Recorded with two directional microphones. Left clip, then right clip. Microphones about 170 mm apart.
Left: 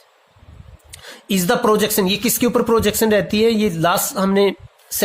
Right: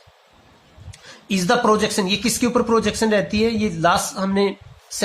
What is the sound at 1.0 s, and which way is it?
Speech, 55° left (ahead or behind).